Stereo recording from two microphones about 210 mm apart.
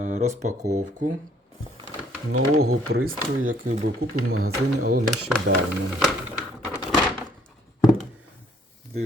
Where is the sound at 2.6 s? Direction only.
75° right (ahead or behind).